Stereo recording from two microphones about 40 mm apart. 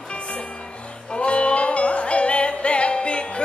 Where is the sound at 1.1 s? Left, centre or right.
Left.